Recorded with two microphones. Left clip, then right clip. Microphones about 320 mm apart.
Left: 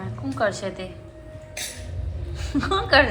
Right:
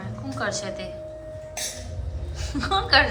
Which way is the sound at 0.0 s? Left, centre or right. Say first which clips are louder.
Left 5 dB; centre.